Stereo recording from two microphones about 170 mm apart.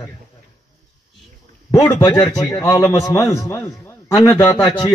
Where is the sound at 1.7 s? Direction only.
20° left (ahead or behind).